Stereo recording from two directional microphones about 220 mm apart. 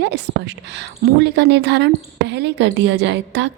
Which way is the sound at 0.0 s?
50° right (ahead or behind).